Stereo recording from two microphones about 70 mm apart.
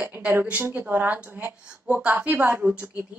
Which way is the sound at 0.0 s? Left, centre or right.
Right.